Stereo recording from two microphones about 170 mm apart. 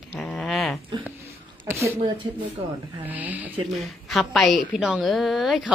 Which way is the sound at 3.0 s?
10° right (ahead or behind).